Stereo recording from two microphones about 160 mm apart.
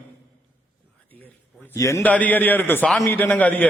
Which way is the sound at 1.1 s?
10° left (ahead or behind).